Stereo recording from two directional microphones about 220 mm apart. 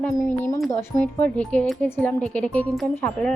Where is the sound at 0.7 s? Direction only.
10° left (ahead or behind).